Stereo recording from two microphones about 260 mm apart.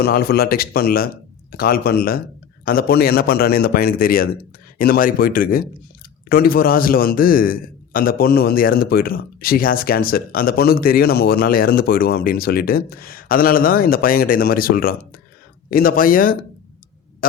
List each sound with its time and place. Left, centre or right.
0.0 s a man's voice: left